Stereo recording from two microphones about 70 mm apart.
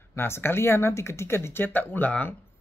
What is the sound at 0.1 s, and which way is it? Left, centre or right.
Speech, left.